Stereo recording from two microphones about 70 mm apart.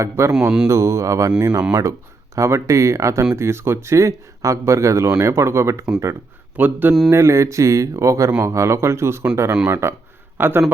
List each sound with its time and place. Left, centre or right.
0.0 s speech: right
0.3 s speech: centre
0.7 s speech: right
1.4 s speech: right
2.3 s speech: right
6.6 s speech: right
7.1 s speech: right
10.3 s a man's voice: right